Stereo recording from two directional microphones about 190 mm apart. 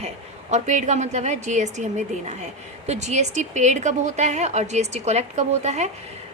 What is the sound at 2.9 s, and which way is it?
A woman's voice, 35° right (ahead or behind).